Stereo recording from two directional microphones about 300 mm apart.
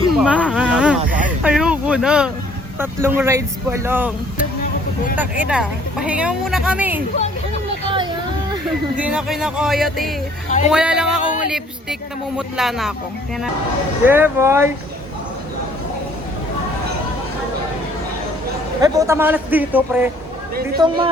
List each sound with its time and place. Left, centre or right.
0.1 s snake: centre
1.5 s vehicle: centre
2.7 s speech: centre
5.1 s speech: centre
8.6 s speech: centre
14.0 s speech: centre
18.8 s speech: centre